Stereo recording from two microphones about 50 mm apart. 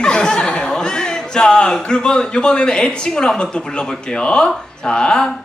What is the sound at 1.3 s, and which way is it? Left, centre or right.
A man's voice, centre.